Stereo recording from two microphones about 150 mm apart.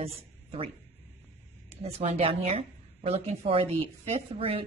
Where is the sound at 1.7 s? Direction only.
45° right (ahead or behind).